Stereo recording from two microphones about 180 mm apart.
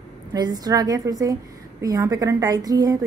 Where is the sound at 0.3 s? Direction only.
20° right (ahead or behind).